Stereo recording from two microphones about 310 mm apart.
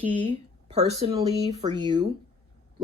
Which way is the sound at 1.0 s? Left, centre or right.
Centre.